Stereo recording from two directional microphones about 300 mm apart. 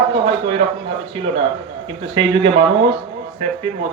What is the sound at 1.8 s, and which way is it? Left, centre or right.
Speech, centre.